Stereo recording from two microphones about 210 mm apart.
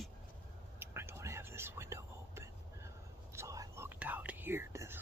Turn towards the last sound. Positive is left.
turn(degrees=-10)  # may be behind; listen again after turning